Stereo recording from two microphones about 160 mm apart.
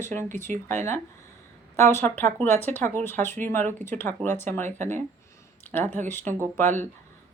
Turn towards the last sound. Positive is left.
turn(degrees=15)  # may be behind; listen again after turning